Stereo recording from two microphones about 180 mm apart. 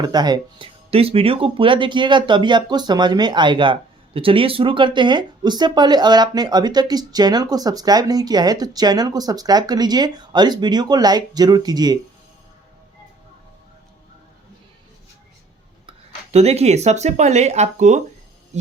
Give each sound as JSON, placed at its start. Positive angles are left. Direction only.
{"t": 0.0, "sound": "speech", "side_deg": -20}
{"t": 15.9, "sound": "speech", "side_deg": -35}
{"t": 18.5, "sound": "a sound", "side_deg": -40}